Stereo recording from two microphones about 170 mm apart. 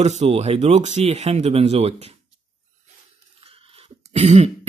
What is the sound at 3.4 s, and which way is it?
Cough, 35° right (ahead or behind).